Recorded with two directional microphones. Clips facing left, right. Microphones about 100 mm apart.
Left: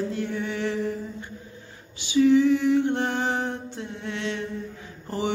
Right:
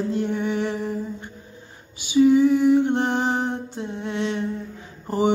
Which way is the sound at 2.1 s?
15° right (ahead or behind).